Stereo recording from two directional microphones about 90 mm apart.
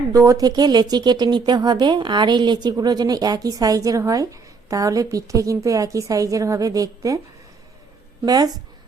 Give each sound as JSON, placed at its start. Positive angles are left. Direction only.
{"t": 0.1, "sound": "a woman's voice", "side_deg": -40}
{"t": 8.2, "sound": "a woman's voice", "side_deg": -45}